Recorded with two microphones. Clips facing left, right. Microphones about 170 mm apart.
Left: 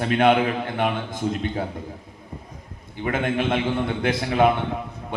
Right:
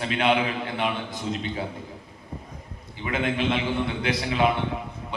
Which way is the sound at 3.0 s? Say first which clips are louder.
Left 3 dB; 50° left (ahead or behind).